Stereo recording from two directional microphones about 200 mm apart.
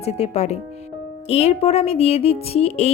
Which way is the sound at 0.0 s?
30° left (ahead or behind).